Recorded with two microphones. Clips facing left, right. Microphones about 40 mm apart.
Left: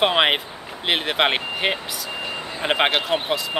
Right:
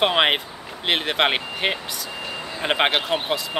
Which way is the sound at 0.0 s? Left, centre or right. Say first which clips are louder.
Left 1 dB; centre.